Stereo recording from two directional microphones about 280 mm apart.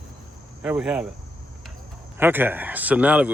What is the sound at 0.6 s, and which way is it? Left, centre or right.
Speech, centre.